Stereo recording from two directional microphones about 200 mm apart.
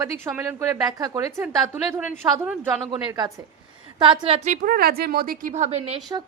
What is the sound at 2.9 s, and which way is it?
A woman's voice, 20° right (ahead or behind).